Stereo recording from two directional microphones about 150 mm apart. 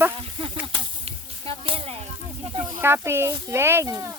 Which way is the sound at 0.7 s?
40° right (ahead or behind).